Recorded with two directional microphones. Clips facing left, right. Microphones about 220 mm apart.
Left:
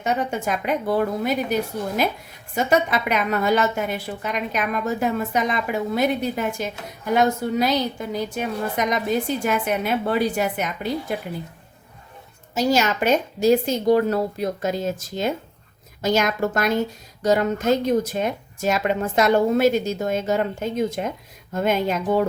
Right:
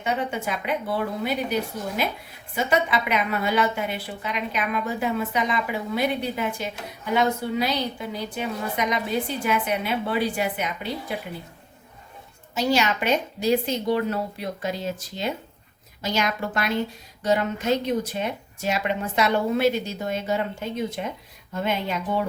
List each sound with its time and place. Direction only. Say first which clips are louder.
0.0 s a woman's voice: left 3 dB; 45° left (ahead or behind)
2.6 s a woman's voice: left 3 dB; 45° left (ahead or behind)
12.5 s a woman's voice: left 3 dB; 45° left (ahead or behind)